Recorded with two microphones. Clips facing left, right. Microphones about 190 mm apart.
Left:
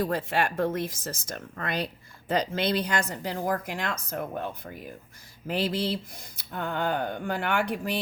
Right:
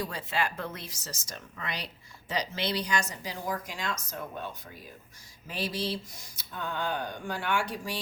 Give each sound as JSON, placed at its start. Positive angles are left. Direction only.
{"t": 0.0, "sound": "speech", "side_deg": 55}